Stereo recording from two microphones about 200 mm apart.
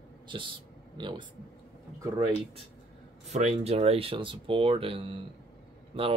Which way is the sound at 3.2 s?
35° right (ahead or behind).